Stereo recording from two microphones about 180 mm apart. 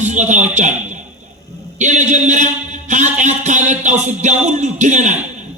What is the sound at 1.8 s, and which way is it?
A man's voice, 40° right (ahead or behind).